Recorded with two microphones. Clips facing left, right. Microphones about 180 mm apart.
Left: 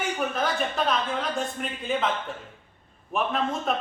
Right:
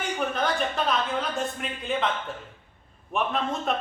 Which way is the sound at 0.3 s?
Centre (ahead or behind).